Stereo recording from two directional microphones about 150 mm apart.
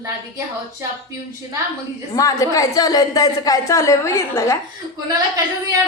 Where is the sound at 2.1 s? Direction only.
20° left (ahead or behind).